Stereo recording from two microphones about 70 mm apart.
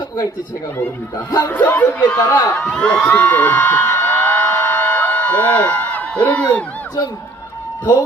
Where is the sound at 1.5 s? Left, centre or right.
Left.